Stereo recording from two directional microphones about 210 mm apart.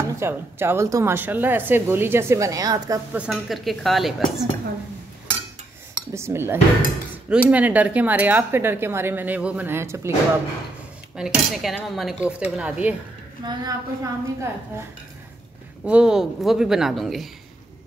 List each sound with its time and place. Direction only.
0.2 s a woman's voice: 10° right (ahead or behind)
6.1 s a woman's voice: 10° right (ahead or behind)
11.1 s speech: centre (ahead or behind)
13.5 s a woman's voice: 15° right (ahead or behind); by 17.3 s centre (ahead or behind)